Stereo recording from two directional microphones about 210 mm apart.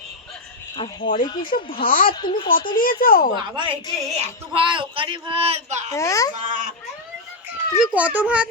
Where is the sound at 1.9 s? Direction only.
40° left (ahead or behind).